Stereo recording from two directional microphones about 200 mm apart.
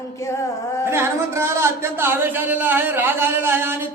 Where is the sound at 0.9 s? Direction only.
10° right (ahead or behind).